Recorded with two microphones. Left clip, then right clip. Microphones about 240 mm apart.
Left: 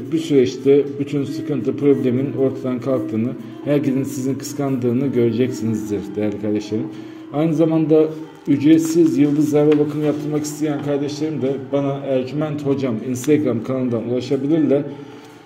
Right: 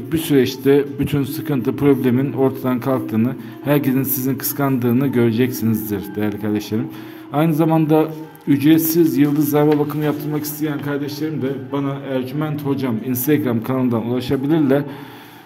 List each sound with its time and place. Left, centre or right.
0.1 s a man's voice: right